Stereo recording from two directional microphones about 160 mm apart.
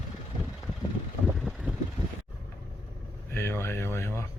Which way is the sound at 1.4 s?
Centre (ahead or behind).